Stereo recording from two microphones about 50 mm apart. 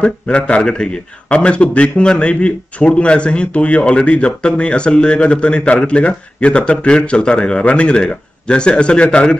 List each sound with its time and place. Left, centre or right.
0.0 s a man's voice: left